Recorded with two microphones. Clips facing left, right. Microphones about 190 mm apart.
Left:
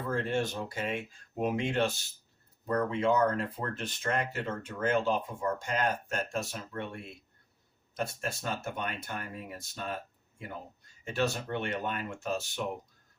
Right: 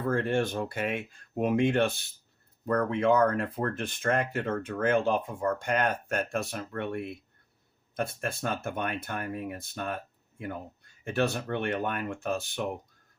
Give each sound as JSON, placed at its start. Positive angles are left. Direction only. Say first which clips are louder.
{"t": 0.0, "sound": "speech", "louder": "right 4 dB", "side_deg": -55}